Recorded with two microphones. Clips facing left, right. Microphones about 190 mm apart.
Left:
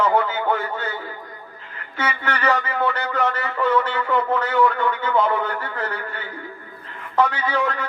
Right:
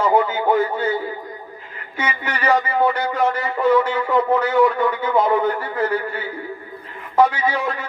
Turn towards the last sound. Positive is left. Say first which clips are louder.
# right 1 dB
turn(degrees=-10)  # may be behind; listen again after turning